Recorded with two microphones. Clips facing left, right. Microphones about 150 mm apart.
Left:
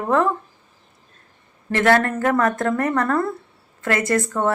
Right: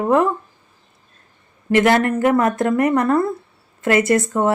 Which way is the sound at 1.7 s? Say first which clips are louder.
Right 3 dB; 15° right (ahead or behind).